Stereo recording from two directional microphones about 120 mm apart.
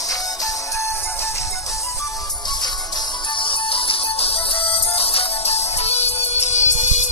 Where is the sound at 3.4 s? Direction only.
50° left (ahead or behind).